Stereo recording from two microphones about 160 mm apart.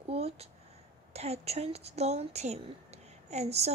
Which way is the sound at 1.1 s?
40° right (ahead or behind).